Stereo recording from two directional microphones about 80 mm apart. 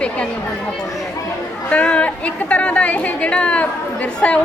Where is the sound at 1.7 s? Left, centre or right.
Centre.